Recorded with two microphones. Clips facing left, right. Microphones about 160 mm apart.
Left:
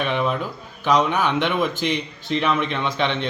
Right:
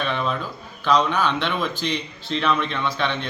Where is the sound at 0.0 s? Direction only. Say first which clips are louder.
Left 3 dB; 15° left (ahead or behind).